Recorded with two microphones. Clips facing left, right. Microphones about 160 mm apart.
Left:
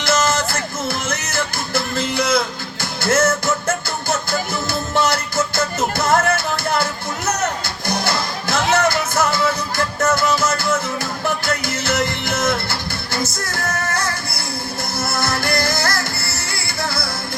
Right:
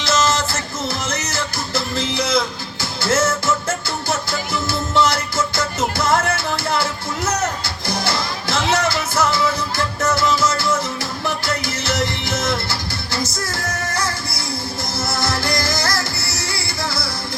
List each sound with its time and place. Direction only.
0.0 s music: 50° left (ahead or behind)
13.9 s music: 55° left (ahead or behind)